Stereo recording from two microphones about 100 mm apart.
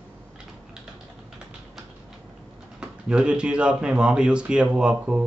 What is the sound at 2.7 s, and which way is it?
Speech, 10° right (ahead or behind).